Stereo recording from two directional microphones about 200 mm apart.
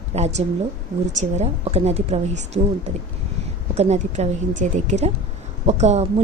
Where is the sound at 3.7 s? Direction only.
35° right (ahead or behind).